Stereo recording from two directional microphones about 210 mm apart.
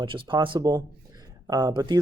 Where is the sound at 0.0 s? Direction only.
25° right (ahead or behind).